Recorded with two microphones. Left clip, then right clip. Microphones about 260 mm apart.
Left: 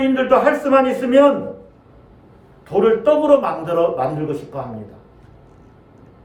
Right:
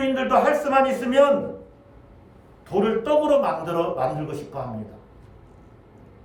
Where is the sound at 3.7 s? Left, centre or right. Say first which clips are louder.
Left 6 dB; right.